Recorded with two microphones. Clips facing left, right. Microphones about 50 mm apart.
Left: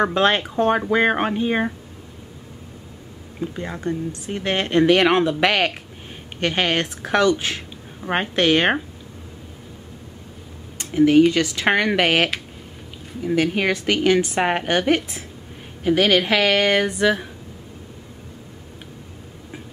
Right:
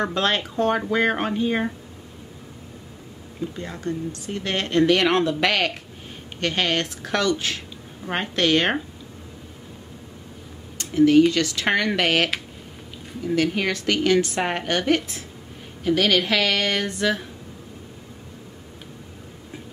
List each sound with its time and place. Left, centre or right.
0.0 s speech: left
3.3 s speech: left
10.8 s speech: left
13.3 s speech: left